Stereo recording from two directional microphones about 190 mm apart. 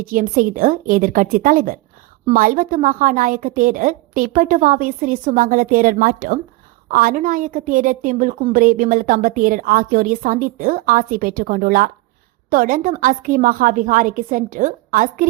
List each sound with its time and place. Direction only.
0.0 s a woman's voice: 50° right (ahead or behind)